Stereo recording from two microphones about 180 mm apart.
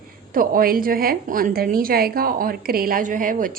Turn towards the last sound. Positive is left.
turn(degrees=-50)  # may be behind; listen again after turning